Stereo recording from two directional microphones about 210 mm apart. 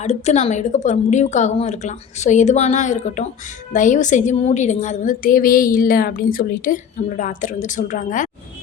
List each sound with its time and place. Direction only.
0.0 s a woman's voice: 30° left (ahead or behind)